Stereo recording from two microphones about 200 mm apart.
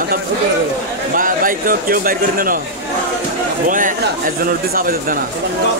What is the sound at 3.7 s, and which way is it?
A man's voice, 40° right (ahead or behind).